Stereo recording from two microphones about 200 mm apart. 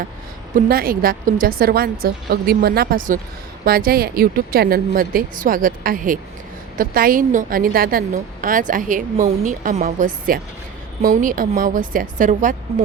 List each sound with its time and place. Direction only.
0.5 s a woman's voice: 45° right (ahead or behind)